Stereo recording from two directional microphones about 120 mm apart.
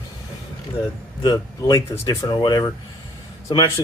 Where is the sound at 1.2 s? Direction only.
35° left (ahead or behind).